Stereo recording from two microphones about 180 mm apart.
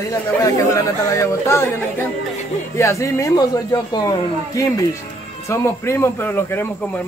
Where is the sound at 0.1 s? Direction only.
15° left (ahead or behind).